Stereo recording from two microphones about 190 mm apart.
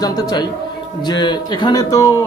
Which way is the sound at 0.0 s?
20° left (ahead or behind).